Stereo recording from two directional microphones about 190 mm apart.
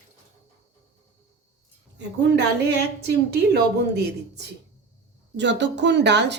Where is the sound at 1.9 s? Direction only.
65° right (ahead or behind).